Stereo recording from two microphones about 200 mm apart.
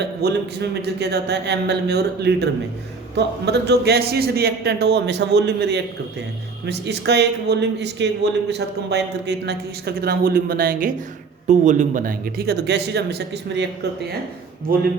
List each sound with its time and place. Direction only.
0.2 s speech: 55° right (ahead or behind)